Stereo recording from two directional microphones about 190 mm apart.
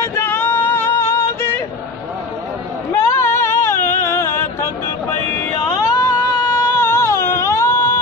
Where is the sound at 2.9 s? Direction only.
15° left (ahead or behind).